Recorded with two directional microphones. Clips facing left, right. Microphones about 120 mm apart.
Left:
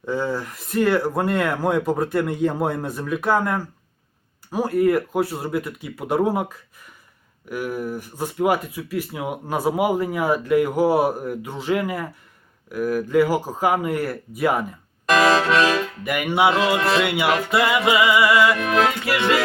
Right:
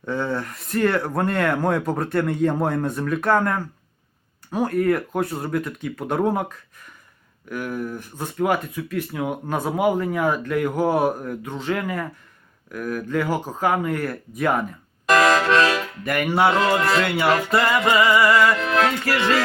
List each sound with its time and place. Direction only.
0.0 s speech: 5° left (ahead or behind)
7.5 s speech: 10° left (ahead or behind)
15.1 s music: 25° left (ahead or behind)
15.7 s speech: centre (ahead or behind)
19.0 s speech: centre (ahead or behind)